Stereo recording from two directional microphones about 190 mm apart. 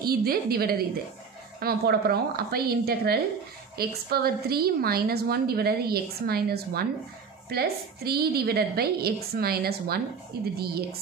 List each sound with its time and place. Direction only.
0.0 s a woman's voice: 55° right (ahead or behind)